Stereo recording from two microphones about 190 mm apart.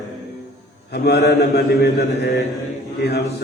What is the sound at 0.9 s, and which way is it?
Speech, 60° left (ahead or behind).